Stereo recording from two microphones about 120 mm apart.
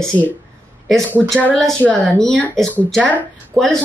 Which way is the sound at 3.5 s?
20° right (ahead or behind).